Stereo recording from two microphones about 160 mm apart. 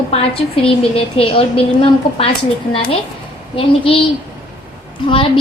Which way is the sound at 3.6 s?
35° left (ahead or behind).